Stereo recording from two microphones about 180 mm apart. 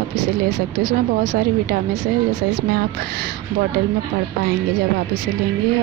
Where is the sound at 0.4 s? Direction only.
60° right (ahead or behind).